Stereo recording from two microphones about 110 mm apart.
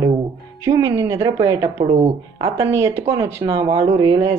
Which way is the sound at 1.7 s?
65° right (ahead or behind).